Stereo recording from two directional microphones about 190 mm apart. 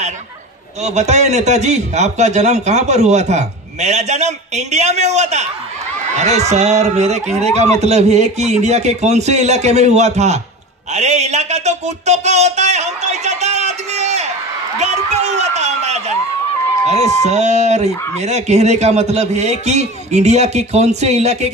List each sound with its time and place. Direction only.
0.8 s a man's voice: 35° right (ahead or behind)
14.8 s a sound: 35° right (ahead or behind)
16.8 s a man's voice: 35° right (ahead or behind)